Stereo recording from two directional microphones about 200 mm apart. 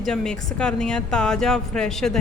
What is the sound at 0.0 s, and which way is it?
A woman's voice, 5° left (ahead or behind).